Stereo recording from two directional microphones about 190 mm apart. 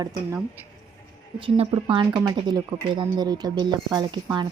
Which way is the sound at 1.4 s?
25° right (ahead or behind).